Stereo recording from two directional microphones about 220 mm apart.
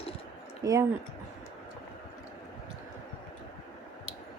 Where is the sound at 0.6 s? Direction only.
15° right (ahead or behind).